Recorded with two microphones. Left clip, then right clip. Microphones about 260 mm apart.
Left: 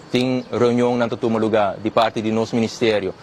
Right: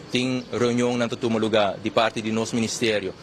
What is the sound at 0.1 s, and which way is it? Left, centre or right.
Speech, left.